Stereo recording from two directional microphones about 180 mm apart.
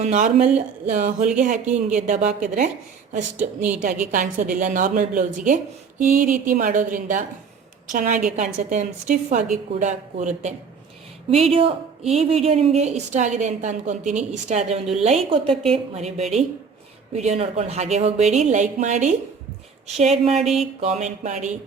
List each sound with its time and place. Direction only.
0.0 s a woman's voice: 40° right (ahead or behind)
3.3 s a woman's voice: 10° right (ahead or behind)
4.0 s a woman's voice: 45° right (ahead or behind)
11.5 s a woman's voice: 35° right (ahead or behind)
20.4 s a sound: centre (ahead or behind)
20.8 s a woman's voice: 40° right (ahead or behind)